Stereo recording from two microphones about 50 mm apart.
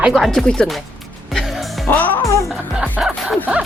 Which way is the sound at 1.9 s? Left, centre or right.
Left.